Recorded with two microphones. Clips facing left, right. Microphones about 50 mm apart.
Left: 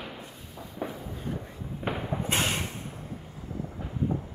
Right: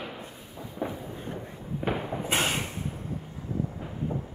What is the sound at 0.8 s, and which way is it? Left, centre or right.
Fireworks, right.